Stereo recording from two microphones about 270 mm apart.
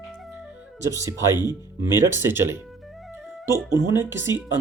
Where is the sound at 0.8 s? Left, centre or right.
Centre.